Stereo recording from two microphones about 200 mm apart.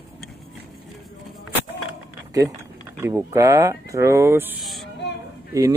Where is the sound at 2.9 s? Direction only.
15° right (ahead or behind).